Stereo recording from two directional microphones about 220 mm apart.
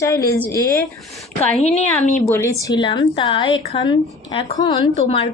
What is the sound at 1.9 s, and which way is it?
A woman's voice, 5° left (ahead or behind).